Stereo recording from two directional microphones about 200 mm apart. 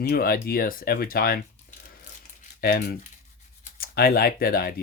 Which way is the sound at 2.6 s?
50° left (ahead or behind).